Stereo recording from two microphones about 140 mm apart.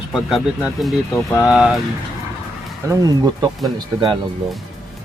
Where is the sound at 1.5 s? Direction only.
Centre (ahead or behind).